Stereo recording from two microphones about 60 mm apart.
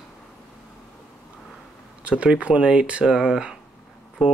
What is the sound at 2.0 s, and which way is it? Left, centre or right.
Speech, centre.